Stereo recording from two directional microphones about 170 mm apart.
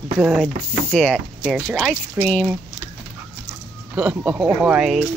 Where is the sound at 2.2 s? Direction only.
10° right (ahead or behind).